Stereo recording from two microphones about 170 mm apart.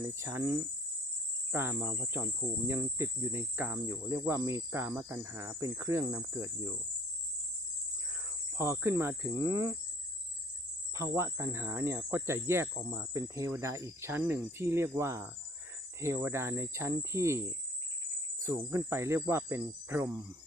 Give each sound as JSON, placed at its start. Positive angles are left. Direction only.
{"t": 0.2, "sound": "cricket", "side_deg": -15}
{"t": 8.5, "sound": "cricket", "side_deg": -15}
{"t": 10.9, "sound": "cricket", "side_deg": -15}